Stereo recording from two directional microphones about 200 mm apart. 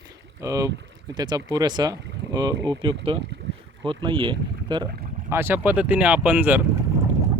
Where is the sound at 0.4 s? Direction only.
15° right (ahead or behind).